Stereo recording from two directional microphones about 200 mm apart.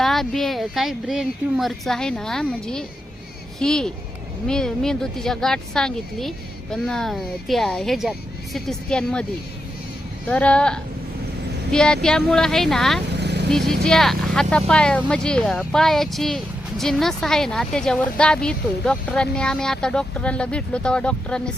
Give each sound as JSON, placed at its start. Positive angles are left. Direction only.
{"t": 0.0, "sound": "speech", "side_deg": 0}
{"t": 10.2, "sound": "speech", "side_deg": 5}
{"t": 13.1, "sound": "vehicle", "side_deg": -60}
{"t": 13.5, "sound": "speech", "side_deg": 0}